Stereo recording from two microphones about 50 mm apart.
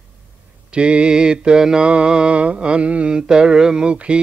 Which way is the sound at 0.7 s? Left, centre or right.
Right.